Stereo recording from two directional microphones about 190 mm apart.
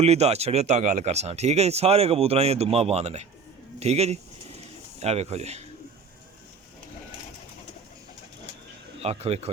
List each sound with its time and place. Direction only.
0.0 s speech: 35° right (ahead or behind)
9.0 s speech: 35° right (ahead or behind)